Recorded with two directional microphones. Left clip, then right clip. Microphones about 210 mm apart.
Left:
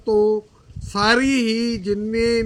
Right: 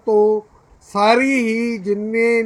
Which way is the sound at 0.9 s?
55° left (ahead or behind).